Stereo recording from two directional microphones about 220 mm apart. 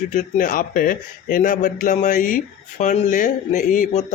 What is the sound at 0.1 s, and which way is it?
A man's voice, 35° left (ahead or behind).